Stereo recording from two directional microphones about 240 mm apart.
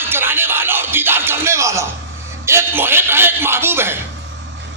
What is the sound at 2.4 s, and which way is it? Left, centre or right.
A man's voice, centre.